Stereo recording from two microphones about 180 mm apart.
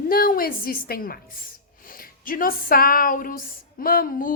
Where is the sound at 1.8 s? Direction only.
50° left (ahead or behind).